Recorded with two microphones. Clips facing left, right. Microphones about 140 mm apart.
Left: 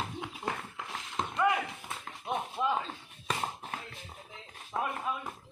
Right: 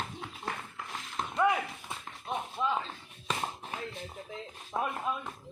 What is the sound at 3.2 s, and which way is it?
Tap, centre (ahead or behind).